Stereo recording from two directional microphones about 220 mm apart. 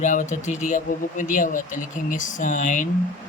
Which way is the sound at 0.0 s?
35° left (ahead or behind).